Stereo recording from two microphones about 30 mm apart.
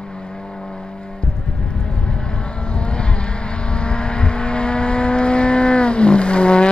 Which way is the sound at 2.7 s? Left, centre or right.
Left.